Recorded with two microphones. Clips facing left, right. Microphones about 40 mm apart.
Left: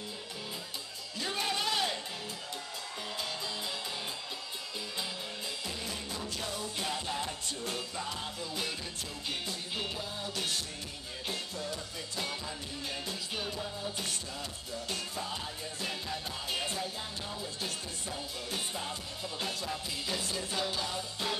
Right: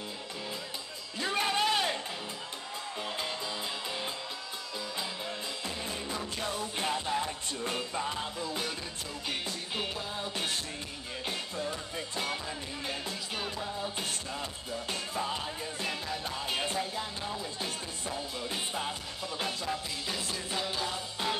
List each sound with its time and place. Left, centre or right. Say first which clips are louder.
1.3 s a sound: right 4 dB; right
5.9 s music: right 3 dB; right
11.2 s music: right 2 dB; right
16.4 s music: right 3 dB; right